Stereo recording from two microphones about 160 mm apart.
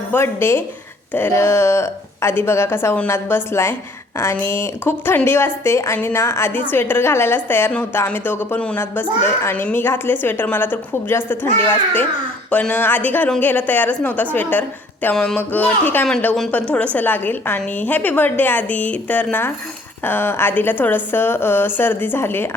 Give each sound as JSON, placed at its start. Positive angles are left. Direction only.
{"t": 0.1, "sound": "a woman's voice", "side_deg": 15}
{"t": 15.0, "sound": "a sound", "side_deg": 5}
{"t": 15.4, "sound": "a woman's voice", "side_deg": 10}